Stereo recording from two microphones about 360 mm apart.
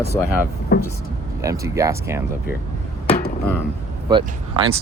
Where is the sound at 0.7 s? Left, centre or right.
Left.